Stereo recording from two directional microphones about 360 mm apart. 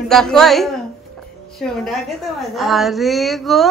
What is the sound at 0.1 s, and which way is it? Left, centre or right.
A woman's voice, centre.